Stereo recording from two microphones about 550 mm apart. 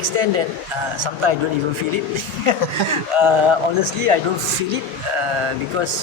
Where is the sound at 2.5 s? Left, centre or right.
Right.